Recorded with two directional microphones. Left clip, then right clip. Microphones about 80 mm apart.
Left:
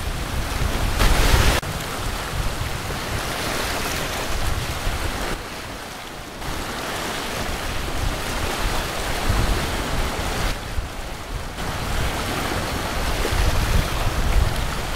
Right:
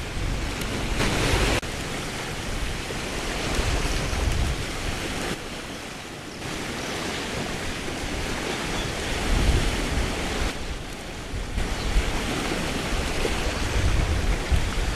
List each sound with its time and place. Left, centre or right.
0.9 s waves: left